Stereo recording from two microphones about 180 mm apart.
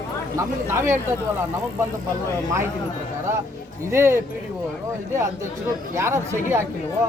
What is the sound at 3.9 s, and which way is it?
Speech, 15° right (ahead or behind).